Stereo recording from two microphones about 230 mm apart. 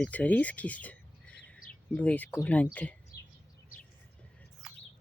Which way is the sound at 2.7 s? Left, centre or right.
Centre.